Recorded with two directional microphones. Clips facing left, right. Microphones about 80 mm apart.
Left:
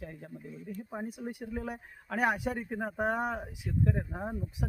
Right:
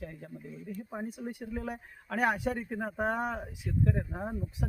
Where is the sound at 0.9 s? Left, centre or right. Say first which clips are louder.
Even; centre.